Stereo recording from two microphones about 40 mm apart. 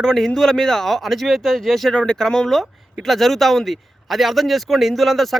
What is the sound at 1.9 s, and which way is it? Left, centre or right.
Speech, left.